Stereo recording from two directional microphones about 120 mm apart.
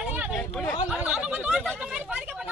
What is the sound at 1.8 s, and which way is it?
Chatter, 10° right (ahead or behind).